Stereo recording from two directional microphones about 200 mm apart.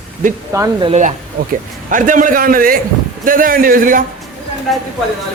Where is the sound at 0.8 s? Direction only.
35° right (ahead or behind).